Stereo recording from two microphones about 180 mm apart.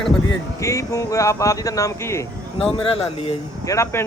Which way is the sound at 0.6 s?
15° left (ahead or behind).